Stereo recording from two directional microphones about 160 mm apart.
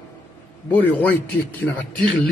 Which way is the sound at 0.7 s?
10° left (ahead or behind).